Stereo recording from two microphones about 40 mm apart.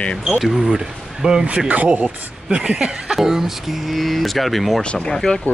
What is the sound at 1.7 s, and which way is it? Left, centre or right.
Speech, right.